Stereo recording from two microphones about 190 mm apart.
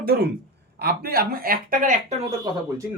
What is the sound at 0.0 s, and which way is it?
Speech, 50° right (ahead or behind).